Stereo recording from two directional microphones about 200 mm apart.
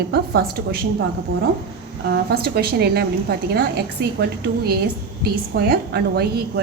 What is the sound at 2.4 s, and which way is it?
Speech, 50° right (ahead or behind).